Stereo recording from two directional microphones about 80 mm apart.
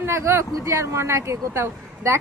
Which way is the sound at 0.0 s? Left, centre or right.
Right.